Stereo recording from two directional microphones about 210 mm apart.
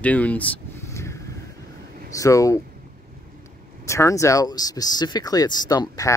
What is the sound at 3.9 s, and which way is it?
Speech, 15° left (ahead or behind).